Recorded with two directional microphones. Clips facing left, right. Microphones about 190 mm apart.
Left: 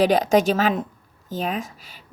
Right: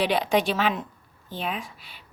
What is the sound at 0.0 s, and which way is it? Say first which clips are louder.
Speech: left 6 dB; 40° left (ahead or behind).